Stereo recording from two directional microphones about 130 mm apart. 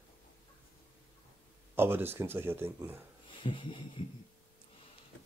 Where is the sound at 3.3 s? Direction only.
40° left (ahead or behind).